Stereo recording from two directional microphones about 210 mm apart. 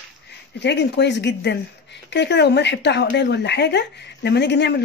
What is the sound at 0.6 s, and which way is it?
A woman's voice, 55° left (ahead or behind).